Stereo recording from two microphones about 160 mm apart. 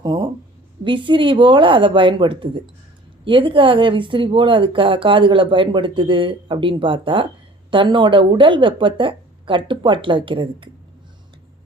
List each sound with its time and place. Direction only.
0.0 s speech: 30° right (ahead or behind)